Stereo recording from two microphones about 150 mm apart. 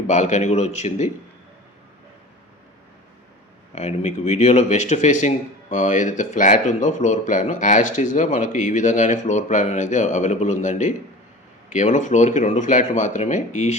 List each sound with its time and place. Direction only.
0.1 s speech: 50° left (ahead or behind)
3.8 s speech: 50° left (ahead or behind)